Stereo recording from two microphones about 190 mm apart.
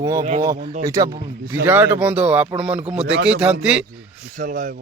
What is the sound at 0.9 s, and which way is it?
Speech, 15° right (ahead or behind).